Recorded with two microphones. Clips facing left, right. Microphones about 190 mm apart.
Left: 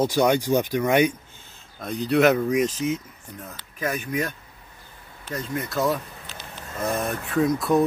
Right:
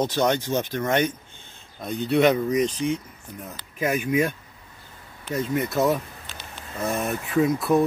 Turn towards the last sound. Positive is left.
turn(degrees=0)  # may be behind; listen again after turning